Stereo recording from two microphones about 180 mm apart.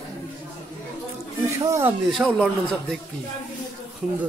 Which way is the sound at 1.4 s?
15° right (ahead or behind).